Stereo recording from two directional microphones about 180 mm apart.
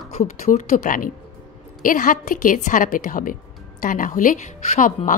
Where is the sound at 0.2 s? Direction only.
45° left (ahead or behind).